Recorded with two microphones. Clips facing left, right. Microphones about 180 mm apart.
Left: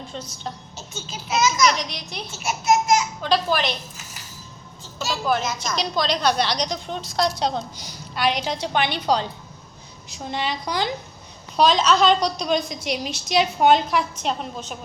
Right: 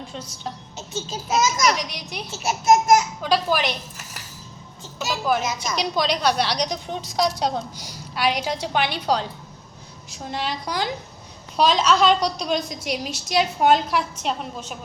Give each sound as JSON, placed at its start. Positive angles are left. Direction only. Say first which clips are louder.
{"t": 0.1, "sound": "a woman's voice", "louder": "even", "side_deg": -10}
{"t": 0.9, "sound": "a child's voice", "louder": "right 2 dB", "side_deg": -40}
{"t": 1.7, "sound": "a woman's voice", "louder": "right 1 dB", "side_deg": -10}
{"t": 2.3, "sound": "a child's voice", "louder": "right 3 dB", "side_deg": -40}
{"t": 3.2, "sound": "a woman's voice", "louder": "even", "side_deg": -10}
{"t": 5.0, "sound": "a woman's voice", "louder": "even", "side_deg": -10}